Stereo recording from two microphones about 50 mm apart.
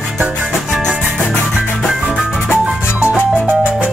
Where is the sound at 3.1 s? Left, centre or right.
Right.